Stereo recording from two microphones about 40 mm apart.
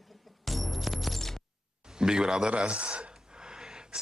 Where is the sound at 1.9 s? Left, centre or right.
Centre.